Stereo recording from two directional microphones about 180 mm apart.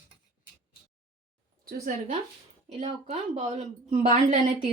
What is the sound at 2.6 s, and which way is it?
A woman's voice, 35° right (ahead or behind).